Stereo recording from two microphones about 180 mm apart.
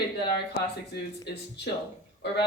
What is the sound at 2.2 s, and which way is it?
Speech, 70° left (ahead or behind).